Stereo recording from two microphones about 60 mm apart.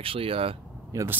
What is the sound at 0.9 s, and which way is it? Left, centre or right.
Speech, right.